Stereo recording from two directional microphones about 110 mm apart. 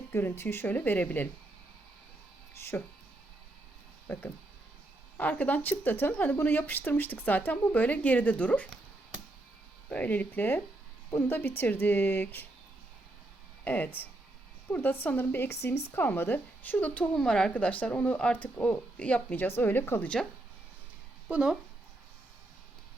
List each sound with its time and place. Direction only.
0.1 s speech: 20° left (ahead or behind)
2.6 s speech: 20° left (ahead or behind)
4.0 s a woman's voice: 20° left (ahead or behind)
9.9 s a woman's voice: 15° left (ahead or behind)
13.7 s a woman's voice: 15° left (ahead or behind)
21.2 s speech: 10° right (ahead or behind)